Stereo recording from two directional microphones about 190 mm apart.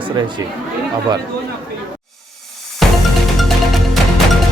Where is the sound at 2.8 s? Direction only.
Centre (ahead or behind).